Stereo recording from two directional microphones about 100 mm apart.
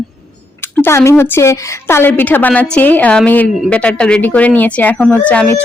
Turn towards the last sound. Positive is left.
turn(degrees=15)  # may be behind; listen again after turning